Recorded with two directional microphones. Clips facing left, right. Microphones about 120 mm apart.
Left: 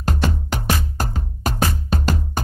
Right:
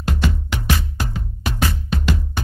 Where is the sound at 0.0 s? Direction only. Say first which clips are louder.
Even; 40° left (ahead or behind).